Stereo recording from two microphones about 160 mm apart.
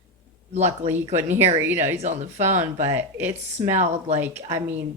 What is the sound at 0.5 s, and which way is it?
Speech, 45° right (ahead or behind).